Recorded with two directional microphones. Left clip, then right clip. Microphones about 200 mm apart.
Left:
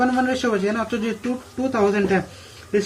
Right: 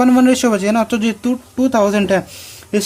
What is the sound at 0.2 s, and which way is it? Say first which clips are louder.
Speech: right 7 dB; 50° right (ahead or behind).